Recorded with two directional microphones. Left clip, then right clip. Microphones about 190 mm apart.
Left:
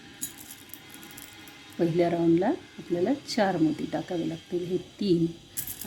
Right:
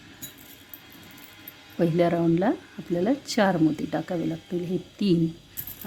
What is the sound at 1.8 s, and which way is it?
Speech, 25° right (ahead or behind).